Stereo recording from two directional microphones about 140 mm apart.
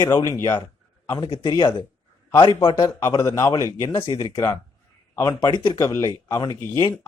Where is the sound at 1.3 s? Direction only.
30° left (ahead or behind).